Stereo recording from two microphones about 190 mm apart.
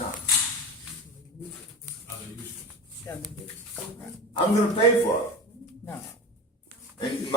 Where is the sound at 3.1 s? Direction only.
15° left (ahead or behind).